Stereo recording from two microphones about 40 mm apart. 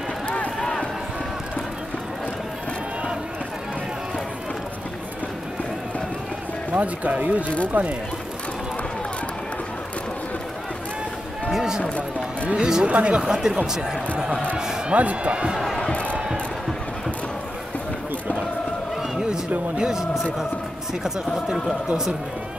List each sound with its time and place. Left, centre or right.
0.6 s run: centre
6.7 s speech: right
11.5 s run: centre
12.4 s speech: right
13.2 s speech: centre
14.9 s speech: right
15.5 s a sound: centre
19.8 s speech: centre